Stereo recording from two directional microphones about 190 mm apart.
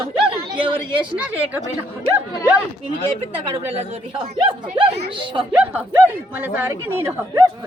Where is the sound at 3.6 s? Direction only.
35° right (ahead or behind).